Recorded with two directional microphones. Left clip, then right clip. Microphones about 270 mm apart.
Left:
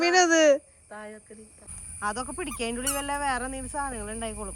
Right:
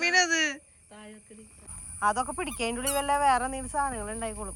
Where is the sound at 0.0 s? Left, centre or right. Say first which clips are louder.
Left 4 dB; centre.